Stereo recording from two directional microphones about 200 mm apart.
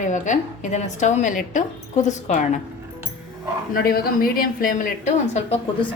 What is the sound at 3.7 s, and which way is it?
A woman's voice, 45° left (ahead or behind).